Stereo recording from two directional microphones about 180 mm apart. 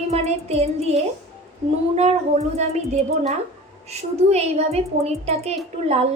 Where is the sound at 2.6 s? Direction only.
35° right (ahead or behind).